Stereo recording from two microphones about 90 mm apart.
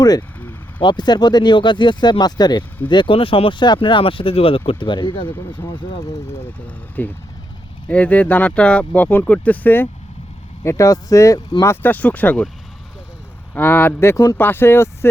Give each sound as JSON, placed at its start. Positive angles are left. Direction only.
{"t": 0.2, "sound": "vehicle", "side_deg": 25}
{"t": 0.8, "sound": "speech", "side_deg": 55}
{"t": 2.9, "sound": "speech", "side_deg": 70}
{"t": 6.7, "sound": "speech", "side_deg": 20}
{"t": 10.6, "sound": "speech", "side_deg": 35}
{"t": 11.6, "sound": "speech", "side_deg": 25}
{"t": 13.5, "sound": "speech", "side_deg": 20}